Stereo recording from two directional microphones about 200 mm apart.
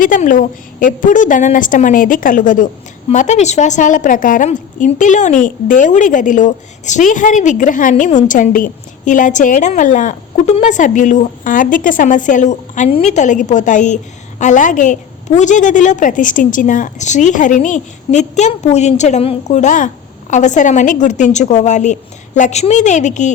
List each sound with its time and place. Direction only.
0.0 s a woman's voice: 40° left (ahead or behind)